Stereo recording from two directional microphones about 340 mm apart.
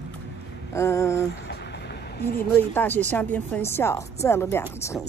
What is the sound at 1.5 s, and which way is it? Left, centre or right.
Vehicle, left.